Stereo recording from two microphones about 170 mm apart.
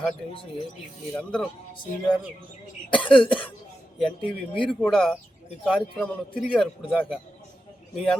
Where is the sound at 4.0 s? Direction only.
30° left (ahead or behind).